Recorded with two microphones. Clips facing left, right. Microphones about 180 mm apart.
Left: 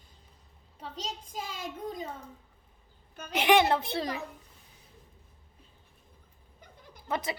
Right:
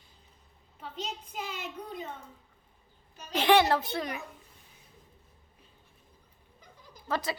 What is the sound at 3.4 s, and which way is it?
Speech, 20° left (ahead or behind).